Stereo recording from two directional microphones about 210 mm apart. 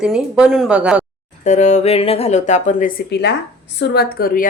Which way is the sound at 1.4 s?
35° left (ahead or behind).